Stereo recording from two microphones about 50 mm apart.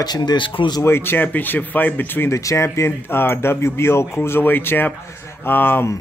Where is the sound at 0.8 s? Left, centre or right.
Left.